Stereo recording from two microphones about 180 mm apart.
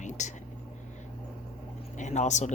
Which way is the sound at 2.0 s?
40° left (ahead or behind).